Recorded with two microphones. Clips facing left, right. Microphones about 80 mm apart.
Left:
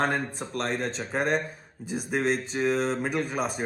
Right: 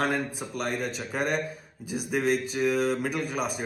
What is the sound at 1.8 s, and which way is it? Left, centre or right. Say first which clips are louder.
A man's voice: even; left.